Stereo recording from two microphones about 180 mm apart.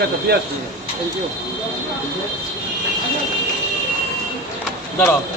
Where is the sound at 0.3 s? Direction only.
60° right (ahead or behind).